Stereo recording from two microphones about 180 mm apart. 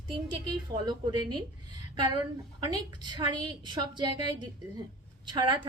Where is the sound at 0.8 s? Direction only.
25° right (ahead or behind).